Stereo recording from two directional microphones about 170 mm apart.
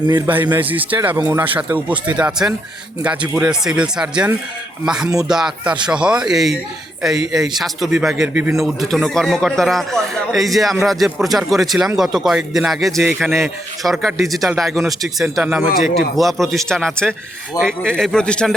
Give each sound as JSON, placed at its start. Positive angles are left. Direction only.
{"t": 0.5, "sound": "a man's voice", "side_deg": -10}
{"t": 13.1, "sound": "speech", "side_deg": -10}
{"t": 13.4, "sound": "a man's voice", "side_deg": 0}